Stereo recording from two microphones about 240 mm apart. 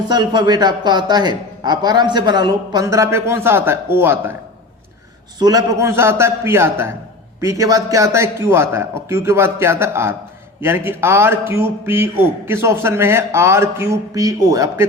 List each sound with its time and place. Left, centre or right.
0.1 s a man's voice: centre
5.4 s a man's voice: centre